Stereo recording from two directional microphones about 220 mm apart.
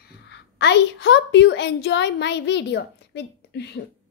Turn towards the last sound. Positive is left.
turn(degrees=50)  # may be behind; listen again after turning